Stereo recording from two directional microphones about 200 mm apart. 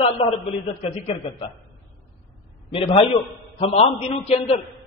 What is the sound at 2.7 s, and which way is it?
A man's voice, 30° left (ahead or behind).